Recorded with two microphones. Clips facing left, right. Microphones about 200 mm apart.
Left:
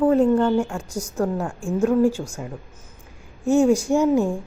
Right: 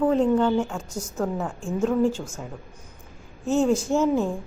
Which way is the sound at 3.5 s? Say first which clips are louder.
Left 4 dB; 10° left (ahead or behind).